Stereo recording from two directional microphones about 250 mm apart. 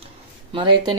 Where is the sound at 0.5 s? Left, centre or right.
Centre.